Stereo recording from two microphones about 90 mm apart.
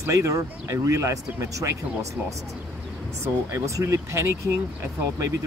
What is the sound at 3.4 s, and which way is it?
Speech, 30° right (ahead or behind).